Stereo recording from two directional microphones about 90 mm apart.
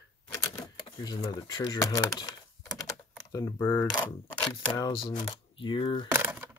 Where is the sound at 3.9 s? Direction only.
50° left (ahead or behind).